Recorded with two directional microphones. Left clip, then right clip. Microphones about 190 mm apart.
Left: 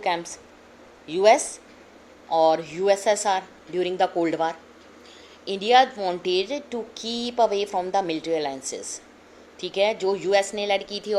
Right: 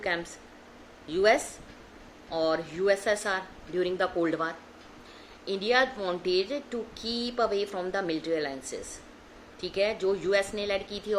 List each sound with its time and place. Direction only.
1.0 s a woman's voice: 15° left (ahead or behind)
9.6 s a woman's voice: 20° left (ahead or behind)